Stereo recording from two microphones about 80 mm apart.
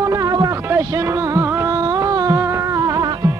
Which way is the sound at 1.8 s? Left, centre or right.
Right.